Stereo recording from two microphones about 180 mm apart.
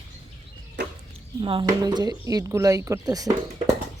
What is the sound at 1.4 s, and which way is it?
Speech, 25° right (ahead or behind).